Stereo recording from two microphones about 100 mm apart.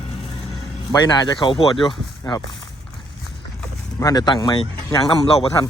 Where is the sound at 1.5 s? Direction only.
60° left (ahead or behind).